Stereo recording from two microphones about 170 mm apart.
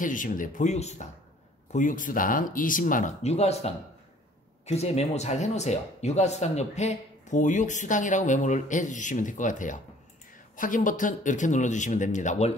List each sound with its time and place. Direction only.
0.0 s speech: 50° left (ahead or behind)